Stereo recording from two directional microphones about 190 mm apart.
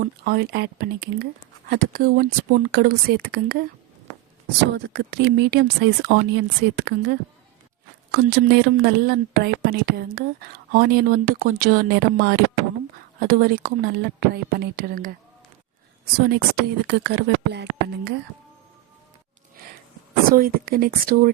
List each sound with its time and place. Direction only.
0.0 s a woman's voice: 55° right (ahead or behind)
4.7 s a woman's voice: 60° right (ahead or behind)
16.1 s speech: 60° right (ahead or behind)
20.3 s a woman's voice: 50° right (ahead or behind)